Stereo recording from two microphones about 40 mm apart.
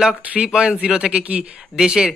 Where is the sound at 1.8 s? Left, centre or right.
Centre.